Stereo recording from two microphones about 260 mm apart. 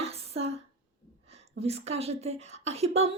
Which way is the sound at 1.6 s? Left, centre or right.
Right.